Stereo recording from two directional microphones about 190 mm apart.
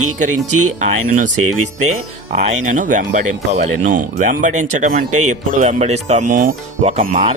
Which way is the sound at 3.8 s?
45° right (ahead or behind).